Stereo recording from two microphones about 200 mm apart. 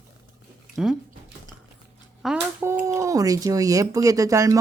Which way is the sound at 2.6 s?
15° right (ahead or behind).